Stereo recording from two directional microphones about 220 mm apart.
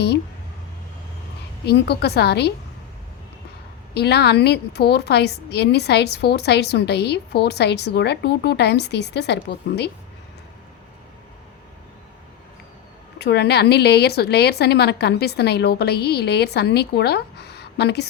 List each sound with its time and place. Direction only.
1.6 s a woman's voice: 45° left (ahead or behind)
3.9 s a woman's voice: 50° left (ahead or behind)
13.1 s a woman's voice: 50° left (ahead or behind)